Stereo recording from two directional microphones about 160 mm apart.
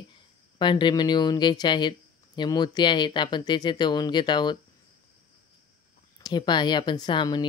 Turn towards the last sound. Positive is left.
turn(degrees=30)  # may be behind; listen again after turning